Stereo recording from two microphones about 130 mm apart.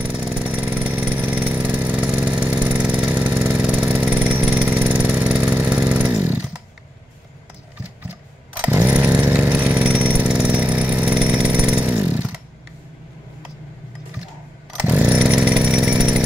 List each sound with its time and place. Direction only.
0.0 s vehicle: 10° right (ahead or behind)
5.3 s motorcycle: 10° right (ahead or behind)
8.1 s chainsaw: 10° right (ahead or behind)
14.8 s chainsaw: 10° right (ahead or behind)